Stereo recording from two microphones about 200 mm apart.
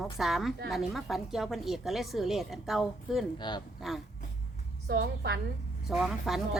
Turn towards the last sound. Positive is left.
turn(degrees=0)  # may be behind; listen again after turning